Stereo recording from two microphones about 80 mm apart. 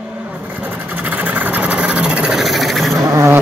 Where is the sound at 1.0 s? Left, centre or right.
Centre.